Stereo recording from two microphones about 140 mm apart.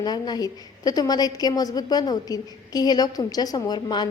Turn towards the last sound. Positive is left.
turn(degrees=30)  # may be behind; listen again after turning